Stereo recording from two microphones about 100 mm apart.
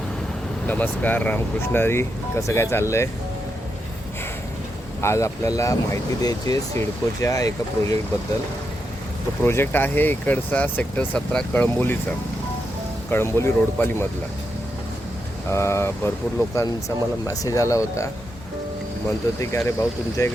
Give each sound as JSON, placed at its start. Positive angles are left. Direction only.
{"t": 0.7, "sound": "speech", "side_deg": 15}
{"t": 4.9, "sound": "speech", "side_deg": 30}
{"t": 9.4, "sound": "speech", "side_deg": 20}
{"t": 13.1, "sound": "speech", "side_deg": 25}
{"t": 15.4, "sound": "speech", "side_deg": 30}
{"t": 19.4, "sound": "speech", "side_deg": 25}